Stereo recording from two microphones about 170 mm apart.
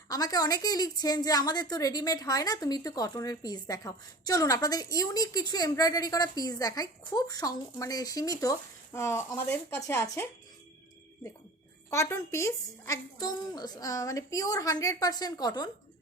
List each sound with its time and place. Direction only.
0.1 s a woman's voice: 20° left (ahead or behind)
11.9 s a woman's voice: 15° left (ahead or behind)